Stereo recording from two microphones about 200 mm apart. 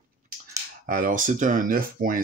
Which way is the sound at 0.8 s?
40° right (ahead or behind).